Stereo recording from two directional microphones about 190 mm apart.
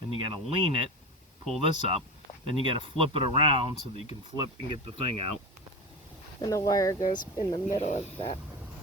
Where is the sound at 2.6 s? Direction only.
25° right (ahead or behind).